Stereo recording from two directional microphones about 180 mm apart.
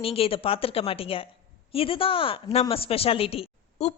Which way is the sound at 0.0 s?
30° left (ahead or behind).